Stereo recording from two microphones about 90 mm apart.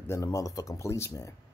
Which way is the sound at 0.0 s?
35° left (ahead or behind).